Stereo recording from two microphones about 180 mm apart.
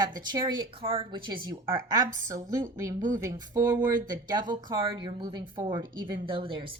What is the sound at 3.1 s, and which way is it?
Speech, 15° right (ahead or behind).